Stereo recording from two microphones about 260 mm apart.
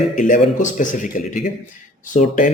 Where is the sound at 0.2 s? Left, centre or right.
Left.